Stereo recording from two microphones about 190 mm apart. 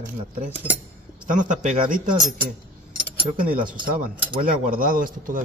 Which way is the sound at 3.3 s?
45° right (ahead or behind).